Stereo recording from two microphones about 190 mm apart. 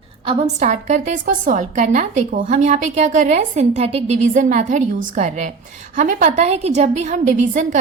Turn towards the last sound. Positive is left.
turn(degrees=-40)  # may be behind; listen again after turning